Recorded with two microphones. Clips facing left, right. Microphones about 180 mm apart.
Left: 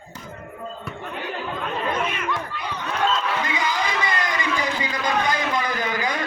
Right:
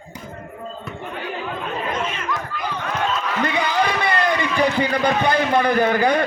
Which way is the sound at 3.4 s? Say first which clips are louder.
Right 5 dB; 65° right (ahead or behind).